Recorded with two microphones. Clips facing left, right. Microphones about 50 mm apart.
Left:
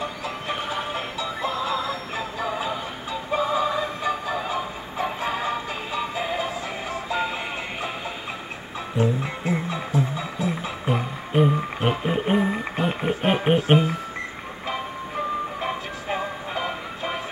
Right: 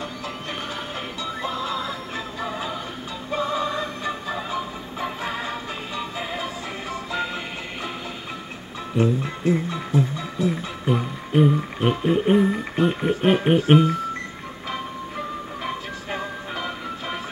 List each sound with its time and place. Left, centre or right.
0.0 s music: centre
3.3 s music: centre
8.9 s music: centre
16.5 s music: left